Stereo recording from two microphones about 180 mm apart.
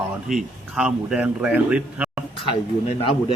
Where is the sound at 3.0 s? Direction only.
30° left (ahead or behind).